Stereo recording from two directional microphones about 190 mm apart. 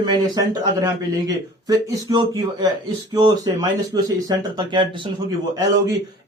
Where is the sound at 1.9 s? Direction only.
20° right (ahead or behind).